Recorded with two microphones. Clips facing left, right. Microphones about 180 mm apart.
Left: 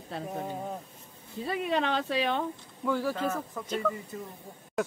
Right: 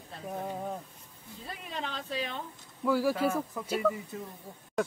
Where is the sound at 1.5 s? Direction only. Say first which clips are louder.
Left 11 dB; 75° left (ahead or behind).